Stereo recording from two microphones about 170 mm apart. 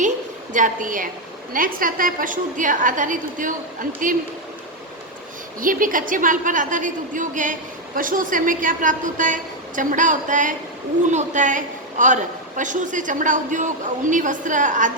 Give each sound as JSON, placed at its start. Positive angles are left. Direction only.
{"t": 0.5, "sound": "a woman's voice", "side_deg": -50}
{"t": 5.5, "sound": "a woman's voice", "side_deg": -55}